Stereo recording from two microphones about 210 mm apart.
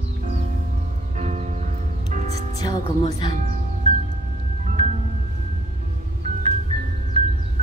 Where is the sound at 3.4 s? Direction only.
35° right (ahead or behind).